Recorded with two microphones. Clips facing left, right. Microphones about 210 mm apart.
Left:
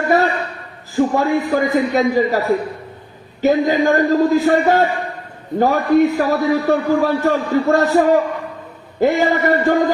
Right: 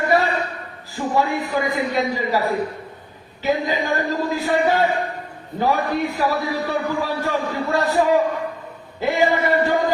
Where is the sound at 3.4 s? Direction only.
45° left (ahead or behind).